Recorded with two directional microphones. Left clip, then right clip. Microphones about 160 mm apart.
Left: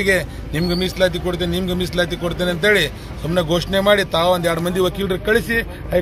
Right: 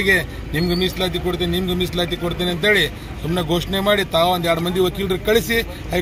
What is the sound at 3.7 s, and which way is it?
A man's voice, 35° left (ahead or behind).